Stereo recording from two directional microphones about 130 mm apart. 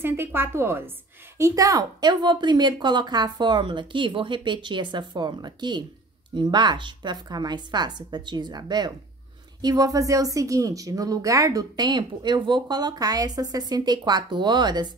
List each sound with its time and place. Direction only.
0.0 s a woman's voice: 20° right (ahead or behind); by 14.9 s 35° right (ahead or behind)